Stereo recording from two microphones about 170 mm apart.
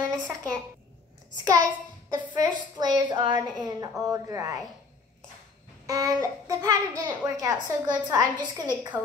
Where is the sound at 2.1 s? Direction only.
25° right (ahead or behind).